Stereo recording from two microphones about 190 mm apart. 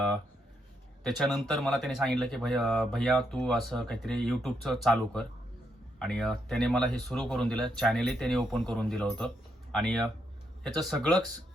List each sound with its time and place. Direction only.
1.0 s speech: centre (ahead or behind)